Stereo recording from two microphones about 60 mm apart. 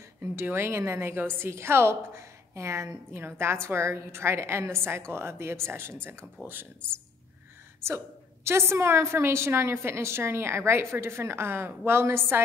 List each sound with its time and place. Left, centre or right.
0.2 s a woman's voice: right
3.1 s a woman's voice: right
8.5 s a woman's voice: right